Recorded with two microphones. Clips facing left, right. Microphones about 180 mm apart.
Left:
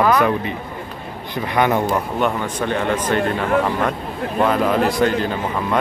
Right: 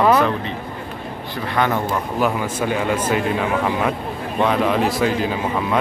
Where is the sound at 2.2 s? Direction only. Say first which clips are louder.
Even; 5° right (ahead or behind).